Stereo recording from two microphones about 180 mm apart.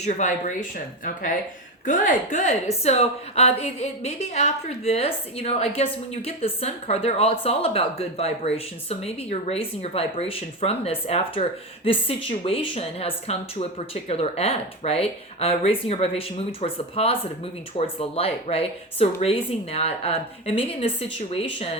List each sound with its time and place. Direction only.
0.0 s a woman's voice: 40° left (ahead or behind)
1.8 s a woman's voice: 45° left (ahead or behind)